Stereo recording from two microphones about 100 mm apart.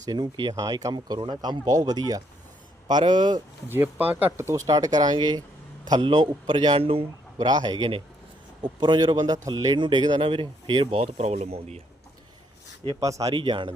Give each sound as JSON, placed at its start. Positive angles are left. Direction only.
{"t": 0.0, "sound": "speech", "side_deg": -45}
{"t": 0.5, "sound": "speech", "side_deg": -35}
{"t": 3.7, "sound": "a man's voice", "side_deg": -20}
{"t": 7.4, "sound": "speech", "side_deg": -45}
{"t": 13.0, "sound": "speech", "side_deg": -35}
{"t": 13.3, "sound": "a man's voice", "side_deg": -55}